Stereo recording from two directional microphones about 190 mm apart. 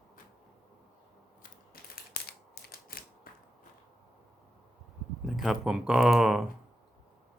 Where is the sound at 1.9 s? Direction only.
55° left (ahead or behind).